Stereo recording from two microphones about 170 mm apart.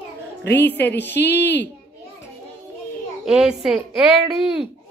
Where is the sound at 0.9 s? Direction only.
90° left.